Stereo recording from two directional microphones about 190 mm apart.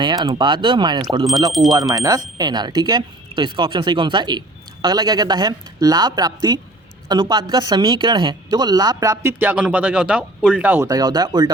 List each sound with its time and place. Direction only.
0.0 s speech: 25° right (ahead or behind)